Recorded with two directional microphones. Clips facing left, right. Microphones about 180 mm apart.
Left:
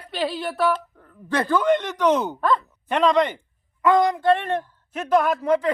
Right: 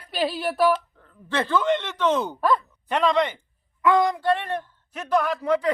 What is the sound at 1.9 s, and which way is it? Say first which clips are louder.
Speech: left 3 dB; 15° left (ahead or behind).